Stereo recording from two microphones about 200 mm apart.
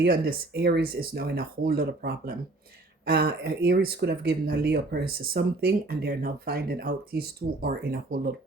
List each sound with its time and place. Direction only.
0.0 s speech: 50° right (ahead or behind)